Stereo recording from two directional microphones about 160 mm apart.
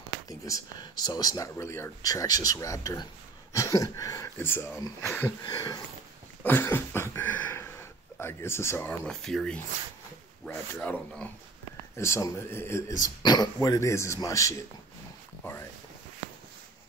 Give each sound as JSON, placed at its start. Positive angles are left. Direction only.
{"t": 0.3, "sound": "speech", "side_deg": 20}
{"t": 6.4, "sound": "a sound", "side_deg": 10}
{"t": 8.2, "sound": "speech", "side_deg": 15}